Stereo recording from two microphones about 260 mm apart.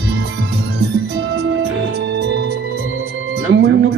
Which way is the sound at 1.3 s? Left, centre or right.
Right.